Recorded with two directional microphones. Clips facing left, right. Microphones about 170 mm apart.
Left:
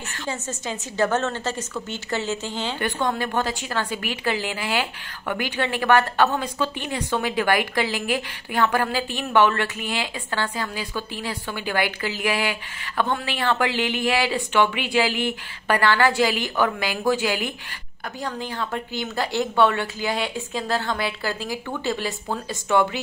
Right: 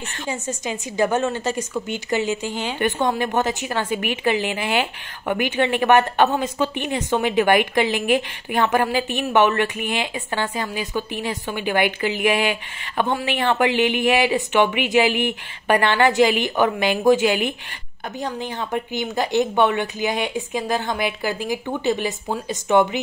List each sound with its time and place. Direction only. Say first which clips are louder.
0.3 s a woman's voice: right 3 dB; 15° right (ahead or behind)